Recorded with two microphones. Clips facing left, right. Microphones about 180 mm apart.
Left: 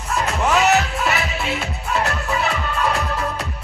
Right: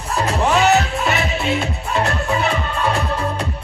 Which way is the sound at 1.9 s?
30° right (ahead or behind).